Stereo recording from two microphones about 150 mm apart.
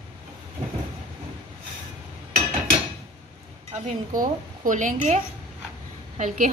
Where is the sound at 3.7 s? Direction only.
60° right (ahead or behind).